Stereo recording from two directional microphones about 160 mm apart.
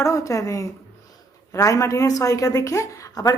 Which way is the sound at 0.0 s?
20° left (ahead or behind).